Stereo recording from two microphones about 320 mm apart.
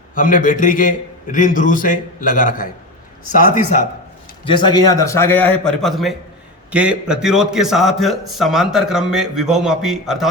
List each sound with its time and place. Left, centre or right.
0.1 s a man's voice: left; by 10.2 s centre